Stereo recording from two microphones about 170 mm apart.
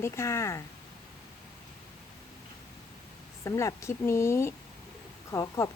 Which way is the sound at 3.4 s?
20° left (ahead or behind).